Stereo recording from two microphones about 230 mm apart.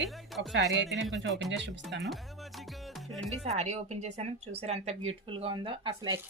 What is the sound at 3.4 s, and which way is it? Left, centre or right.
Speech, right.